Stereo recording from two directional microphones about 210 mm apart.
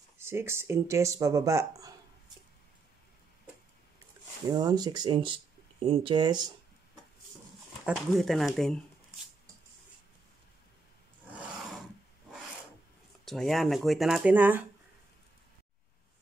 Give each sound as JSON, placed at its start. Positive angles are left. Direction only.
{"t": 0.2, "sound": "speech", "side_deg": -10}
{"t": 4.5, "sound": "speech", "side_deg": -20}
{"t": 7.8, "sound": "speech", "side_deg": 0}
{"t": 13.2, "sound": "speech", "side_deg": 0}